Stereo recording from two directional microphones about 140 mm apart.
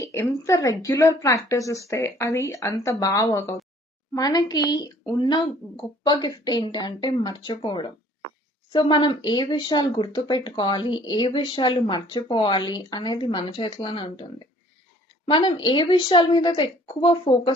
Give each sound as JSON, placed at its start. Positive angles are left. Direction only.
{"t": 0.0, "sound": "a woman's voice", "side_deg": 20}